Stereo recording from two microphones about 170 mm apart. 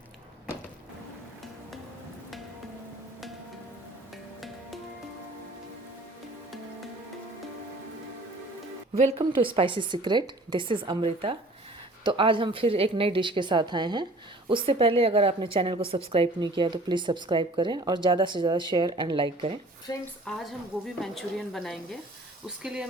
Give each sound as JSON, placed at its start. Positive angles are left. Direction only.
{"t": 9.0, "sound": "a woman's voice", "side_deg": -35}
{"t": 19.9, "sound": "speech", "side_deg": 20}
{"t": 20.3, "sound": "speech", "side_deg": 5}